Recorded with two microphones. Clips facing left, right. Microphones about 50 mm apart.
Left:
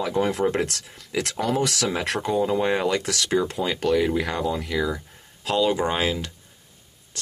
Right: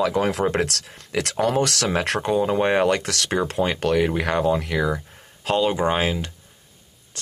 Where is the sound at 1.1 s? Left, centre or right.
Right.